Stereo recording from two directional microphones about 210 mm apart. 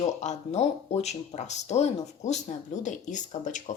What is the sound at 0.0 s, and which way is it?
Speech, 35° left (ahead or behind).